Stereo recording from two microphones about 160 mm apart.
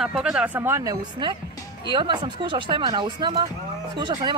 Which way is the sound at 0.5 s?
15° right (ahead or behind).